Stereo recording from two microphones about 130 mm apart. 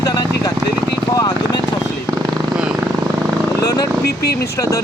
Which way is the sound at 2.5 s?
5° right (ahead or behind).